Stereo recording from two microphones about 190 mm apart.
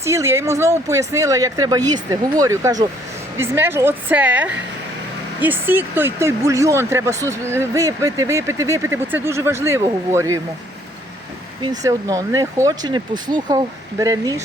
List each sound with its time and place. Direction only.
0.0 s speech: 15° right (ahead or behind)
11.8 s speech: 20° right (ahead or behind)